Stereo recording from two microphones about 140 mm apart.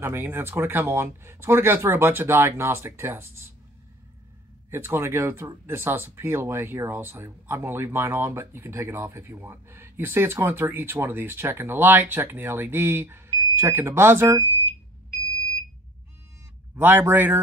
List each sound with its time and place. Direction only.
0.0 s speech: 15° right (ahead or behind)
4.6 s speech: 15° right (ahead or behind)
16.7 s speech: 15° right (ahead or behind)